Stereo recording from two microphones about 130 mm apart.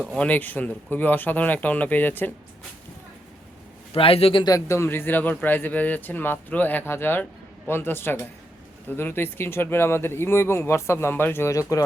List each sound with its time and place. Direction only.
0.2 s speech: 10° left (ahead or behind)
3.9 s a man's voice: 45° left (ahead or behind)
4.4 s speech: 25° left (ahead or behind)